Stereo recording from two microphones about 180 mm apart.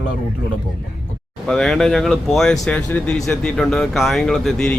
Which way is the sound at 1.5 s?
Centre (ahead or behind).